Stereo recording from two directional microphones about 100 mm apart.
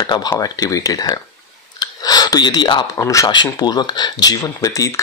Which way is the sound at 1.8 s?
40° left (ahead or behind).